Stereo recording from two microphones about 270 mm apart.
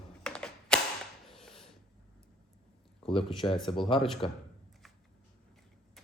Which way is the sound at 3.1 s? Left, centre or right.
Centre.